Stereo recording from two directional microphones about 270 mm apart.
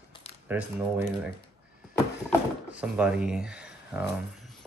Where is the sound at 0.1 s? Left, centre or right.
Left.